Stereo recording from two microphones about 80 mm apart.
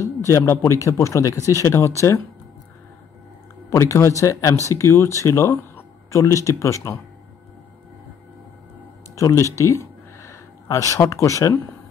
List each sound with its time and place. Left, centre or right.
0.3 s speech: left
3.7 s speech: left
6.1 s speech: left
9.1 s a sound: left
11.1 s speech: left